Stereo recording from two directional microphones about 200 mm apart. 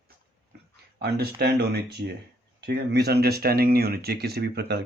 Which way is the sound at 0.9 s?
50° right (ahead or behind).